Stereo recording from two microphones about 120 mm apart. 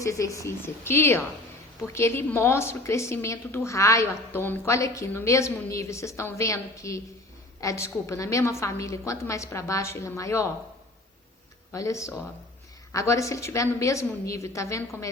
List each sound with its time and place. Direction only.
0.0 s a woman's voice: 25° left (ahead or behind)
11.7 s a woman's voice: 25° left (ahead or behind)